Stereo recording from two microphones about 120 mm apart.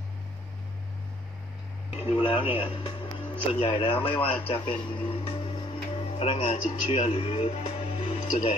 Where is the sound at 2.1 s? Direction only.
50° left (ahead or behind).